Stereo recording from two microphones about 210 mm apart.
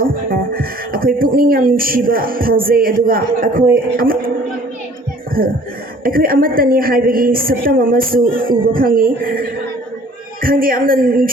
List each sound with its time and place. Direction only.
0.0 s speech: 45° right (ahead or behind)
5.4 s a woman's voice: 45° right (ahead or behind)